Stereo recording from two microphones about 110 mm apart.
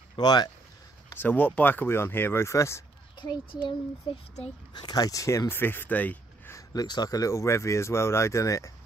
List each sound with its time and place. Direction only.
0.1 s speech: 40° left (ahead or behind)
1.1 s speech: 15° left (ahead or behind)
3.2 s a child's voice: 40° left (ahead or behind)
4.7 s speech: 35° left (ahead or behind); by 6.6 s 15° left (ahead or behind)
6.7 s speech: 35° left (ahead or behind)